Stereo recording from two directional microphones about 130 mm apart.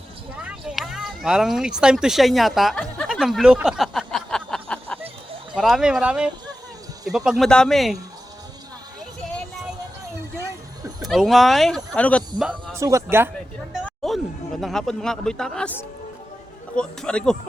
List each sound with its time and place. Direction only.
0.3 s speech: 5° right (ahead or behind)
3.1 s a sound: 5° right (ahead or behind)
5.5 s speech: 5° right (ahead or behind)
7.3 s speech: centre (ahead or behind)
11.0 s speech: centre (ahead or behind)
12.7 s speech: 20° right (ahead or behind)
13.8 s a man's voice: 5° left (ahead or behind)